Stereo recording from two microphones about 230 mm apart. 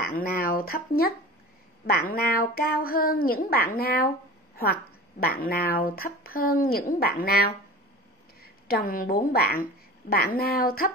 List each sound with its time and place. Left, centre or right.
0.0 s a woman's voice: left
5.2 s a woman's voice: left